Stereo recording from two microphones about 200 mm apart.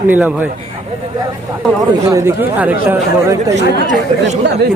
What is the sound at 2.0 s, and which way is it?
Speech, 15° right (ahead or behind).